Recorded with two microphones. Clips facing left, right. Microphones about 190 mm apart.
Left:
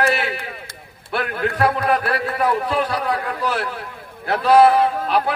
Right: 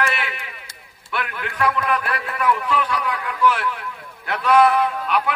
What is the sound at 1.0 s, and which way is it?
A man's voice, 35° left (ahead or behind).